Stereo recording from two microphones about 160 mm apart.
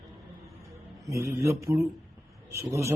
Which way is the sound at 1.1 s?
15° right (ahead or behind).